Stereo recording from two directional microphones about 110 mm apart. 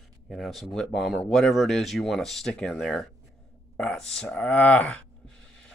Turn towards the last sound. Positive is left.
turn(degrees=10)  # may be behind; listen again after turning